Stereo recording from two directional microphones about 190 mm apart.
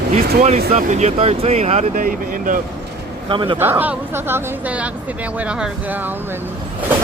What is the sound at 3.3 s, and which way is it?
Speech, 25° right (ahead or behind).